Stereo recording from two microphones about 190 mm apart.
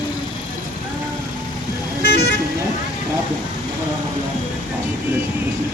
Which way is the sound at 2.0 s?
60° left (ahead or behind).